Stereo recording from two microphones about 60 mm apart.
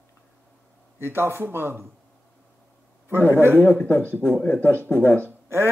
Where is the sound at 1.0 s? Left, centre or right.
Right.